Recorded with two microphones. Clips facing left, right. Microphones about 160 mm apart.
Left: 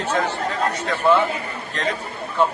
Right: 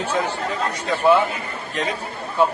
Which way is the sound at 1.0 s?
10° right (ahead or behind).